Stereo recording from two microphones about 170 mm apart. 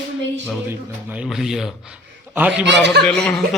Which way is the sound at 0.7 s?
10° right (ahead or behind).